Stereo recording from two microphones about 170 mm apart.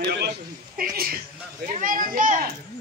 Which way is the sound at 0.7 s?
60° right (ahead or behind).